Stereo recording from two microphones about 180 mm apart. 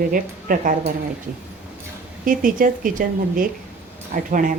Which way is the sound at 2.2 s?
50° right (ahead or behind).